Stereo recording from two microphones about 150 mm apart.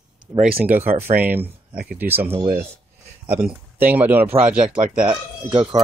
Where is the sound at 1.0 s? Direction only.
15° right (ahead or behind).